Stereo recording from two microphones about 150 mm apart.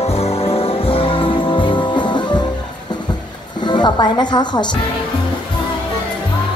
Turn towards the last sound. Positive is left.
turn(degrees=30)  # may be behind; listen again after turning